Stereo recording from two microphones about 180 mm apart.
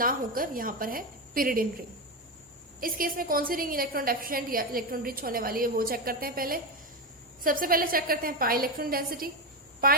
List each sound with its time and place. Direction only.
0.0 s a woman's voice: 50° right (ahead or behind)
2.8 s a woman's voice: 50° right (ahead or behind)